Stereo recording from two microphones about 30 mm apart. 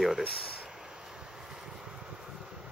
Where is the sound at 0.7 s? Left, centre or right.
Right.